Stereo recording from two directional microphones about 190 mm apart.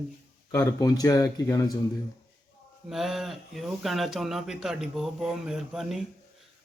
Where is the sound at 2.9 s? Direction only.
Centre (ahead or behind).